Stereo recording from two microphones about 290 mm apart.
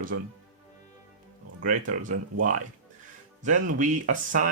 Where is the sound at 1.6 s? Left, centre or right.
Right.